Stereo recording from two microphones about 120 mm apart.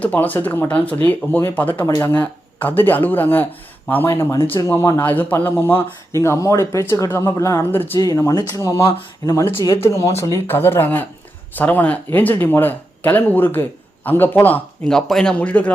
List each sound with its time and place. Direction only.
0.0 s speech: 15° left (ahead or behind)
4.4 s speech: 45° left (ahead or behind)
4.6 s speech: 25° left (ahead or behind)